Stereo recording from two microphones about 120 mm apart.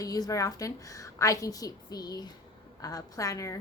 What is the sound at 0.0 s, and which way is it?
A woman's voice, 30° left (ahead or behind).